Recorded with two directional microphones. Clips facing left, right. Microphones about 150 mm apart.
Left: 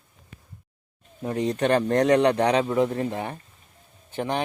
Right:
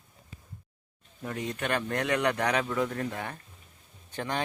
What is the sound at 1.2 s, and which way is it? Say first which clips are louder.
Speech: left 9 dB; 35° left (ahead or behind).